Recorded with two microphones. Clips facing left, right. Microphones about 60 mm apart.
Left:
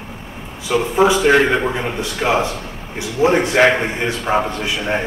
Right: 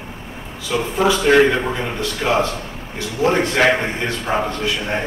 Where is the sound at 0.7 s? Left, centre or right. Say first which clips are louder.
Left 3 dB; centre.